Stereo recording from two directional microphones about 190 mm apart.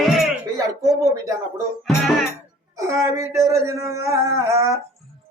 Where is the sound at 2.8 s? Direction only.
15° right (ahead or behind).